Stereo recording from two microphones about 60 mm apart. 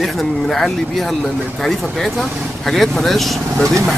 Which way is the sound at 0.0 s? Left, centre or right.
Centre.